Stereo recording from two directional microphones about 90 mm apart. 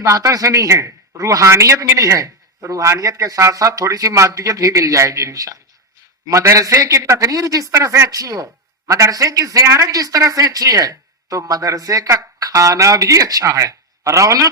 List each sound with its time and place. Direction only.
0.0 s speech: 40° right (ahead or behind)